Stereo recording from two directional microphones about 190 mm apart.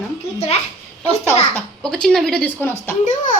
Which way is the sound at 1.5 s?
5° left (ahead or behind).